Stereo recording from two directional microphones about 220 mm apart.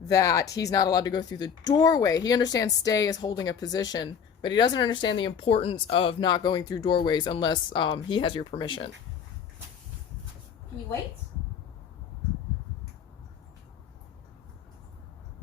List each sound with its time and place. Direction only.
0.0 s speech: 15° left (ahead or behind)